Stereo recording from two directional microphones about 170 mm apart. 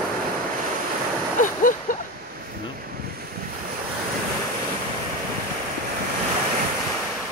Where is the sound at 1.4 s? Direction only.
50° left (ahead or behind).